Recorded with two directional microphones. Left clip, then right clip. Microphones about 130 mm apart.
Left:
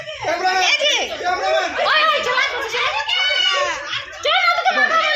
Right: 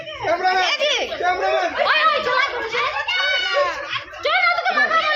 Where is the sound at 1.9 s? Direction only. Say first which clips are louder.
Left 1 dB; 10° left (ahead or behind).